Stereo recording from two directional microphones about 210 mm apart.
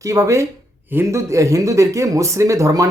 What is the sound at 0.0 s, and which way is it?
A man's voice, 15° right (ahead or behind).